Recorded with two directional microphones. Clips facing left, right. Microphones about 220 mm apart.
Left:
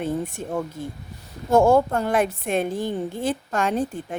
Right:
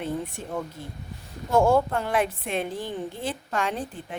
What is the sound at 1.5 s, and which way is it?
A woman's voice, 45° left (ahead or behind).